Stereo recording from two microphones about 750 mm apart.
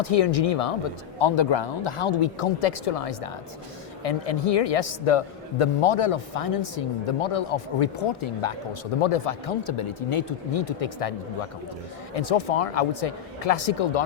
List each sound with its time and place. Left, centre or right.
0.0 s a man's voice: left
1.2 s a man's voice: left
12.1 s a man's voice: left